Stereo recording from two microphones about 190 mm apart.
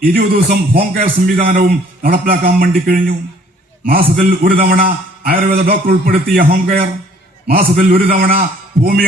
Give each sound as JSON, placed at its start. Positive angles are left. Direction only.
{"t": 0.0, "sound": "a man's voice", "side_deg": -50}